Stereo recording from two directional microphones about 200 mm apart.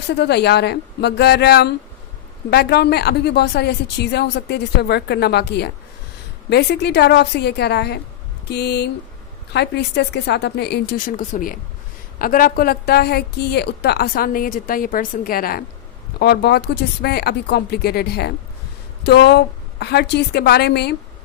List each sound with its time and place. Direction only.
0.1 s a woman's voice: 55° left (ahead or behind)